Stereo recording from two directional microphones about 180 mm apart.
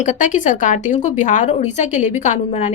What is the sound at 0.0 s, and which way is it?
A woman's voice, 45° left (ahead or behind).